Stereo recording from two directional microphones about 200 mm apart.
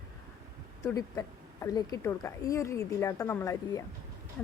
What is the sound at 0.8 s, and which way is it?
A woman's voice, 15° left (ahead or behind).